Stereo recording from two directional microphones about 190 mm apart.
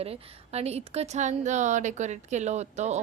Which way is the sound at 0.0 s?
30° right (ahead or behind).